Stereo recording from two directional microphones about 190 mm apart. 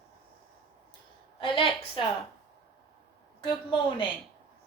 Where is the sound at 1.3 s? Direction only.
25° left (ahead or behind).